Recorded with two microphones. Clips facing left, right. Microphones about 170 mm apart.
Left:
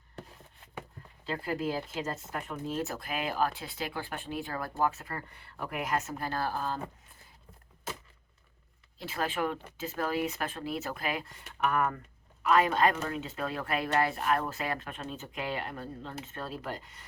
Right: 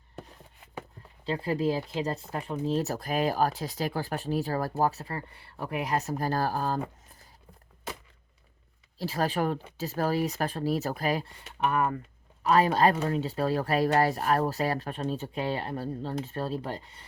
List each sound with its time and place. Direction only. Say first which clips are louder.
1.2 s speech: right 5 dB; 30° right (ahead or behind)
9.0 s speech: right 4 dB; 35° right (ahead or behind)